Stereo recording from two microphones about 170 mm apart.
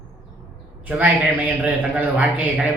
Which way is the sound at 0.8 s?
10° right (ahead or behind).